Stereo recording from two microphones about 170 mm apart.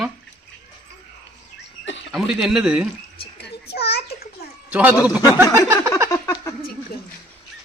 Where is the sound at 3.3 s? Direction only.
75° left (ahead or behind).